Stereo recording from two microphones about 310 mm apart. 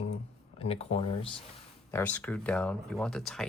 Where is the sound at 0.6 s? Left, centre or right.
Centre.